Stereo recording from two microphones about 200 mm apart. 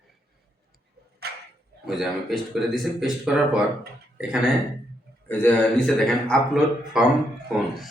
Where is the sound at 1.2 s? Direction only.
55° right (ahead or behind).